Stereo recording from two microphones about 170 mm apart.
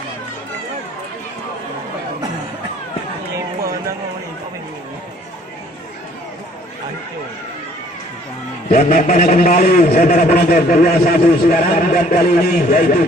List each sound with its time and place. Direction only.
8.7 s a man's voice: 55° left (ahead or behind)